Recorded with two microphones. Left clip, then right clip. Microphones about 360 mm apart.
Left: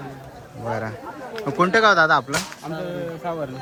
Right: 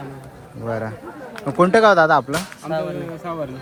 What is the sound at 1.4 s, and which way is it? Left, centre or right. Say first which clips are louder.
Speech: right 3 dB; centre.